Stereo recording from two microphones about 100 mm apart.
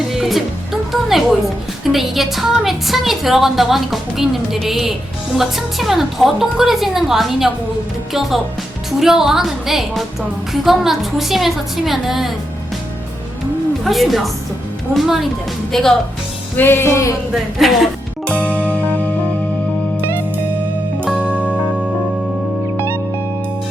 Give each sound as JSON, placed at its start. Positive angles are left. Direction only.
{"t": 0.1, "sound": "music", "side_deg": 0}
{"t": 1.8, "sound": "a woman's voice", "side_deg": 0}
{"t": 13.8, "sound": "a woman's voice", "side_deg": 0}
{"t": 16.6, "sound": "music", "side_deg": 20}
{"t": 17.3, "sound": "a woman's voice", "side_deg": 0}
{"t": 18.3, "sound": "music", "side_deg": 15}
{"t": 21.2, "sound": "music", "side_deg": -10}